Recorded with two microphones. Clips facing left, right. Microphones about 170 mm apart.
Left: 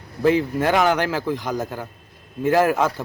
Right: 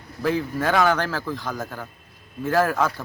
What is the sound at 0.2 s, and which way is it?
A man's voice, 15° left (ahead or behind).